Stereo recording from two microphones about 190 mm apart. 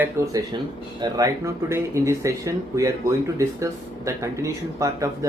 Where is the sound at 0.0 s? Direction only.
15° right (ahead or behind).